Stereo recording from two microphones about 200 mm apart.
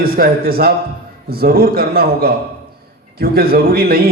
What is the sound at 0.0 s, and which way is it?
A man's voice, 50° right (ahead or behind).